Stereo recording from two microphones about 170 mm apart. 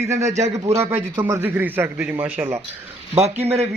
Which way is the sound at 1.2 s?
10° right (ahead or behind).